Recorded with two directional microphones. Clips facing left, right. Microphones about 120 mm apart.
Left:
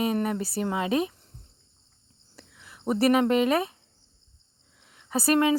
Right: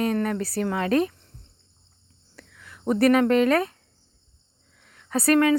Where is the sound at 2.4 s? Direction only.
25° left (ahead or behind).